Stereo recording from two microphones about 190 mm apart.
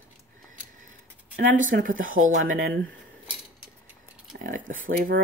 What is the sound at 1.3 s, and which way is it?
Speech, 45° right (ahead or behind).